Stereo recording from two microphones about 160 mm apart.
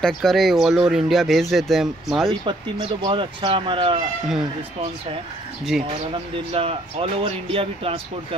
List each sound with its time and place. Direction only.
0.0 s speech: centre (ahead or behind)
2.4 s speech: 30° right (ahead or behind)
6.3 s speech: 35° right (ahead or behind)